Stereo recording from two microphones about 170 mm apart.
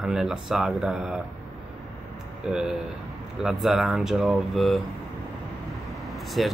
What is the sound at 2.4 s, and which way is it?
Speech, 5° right (ahead or behind).